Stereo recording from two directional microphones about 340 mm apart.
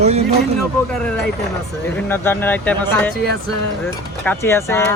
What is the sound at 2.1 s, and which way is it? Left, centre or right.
Speech, centre.